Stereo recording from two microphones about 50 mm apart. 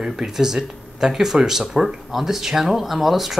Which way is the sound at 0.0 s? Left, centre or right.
Centre.